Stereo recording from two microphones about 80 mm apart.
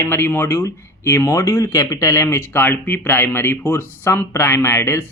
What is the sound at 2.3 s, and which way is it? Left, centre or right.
Speech, left.